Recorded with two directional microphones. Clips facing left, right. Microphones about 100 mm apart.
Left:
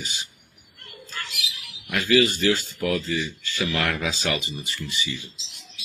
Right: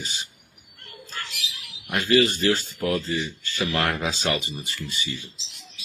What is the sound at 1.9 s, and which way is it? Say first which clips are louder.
Speech: even; 35° right (ahead or behind).